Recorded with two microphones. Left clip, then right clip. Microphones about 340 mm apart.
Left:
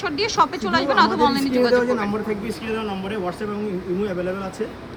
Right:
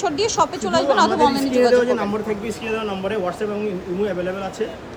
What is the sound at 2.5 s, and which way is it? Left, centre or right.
Speech, centre.